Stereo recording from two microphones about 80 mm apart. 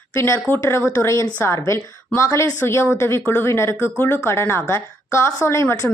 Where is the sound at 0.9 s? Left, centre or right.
Left.